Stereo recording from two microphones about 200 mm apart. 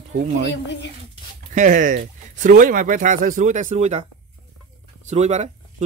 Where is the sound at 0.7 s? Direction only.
60° left (ahead or behind).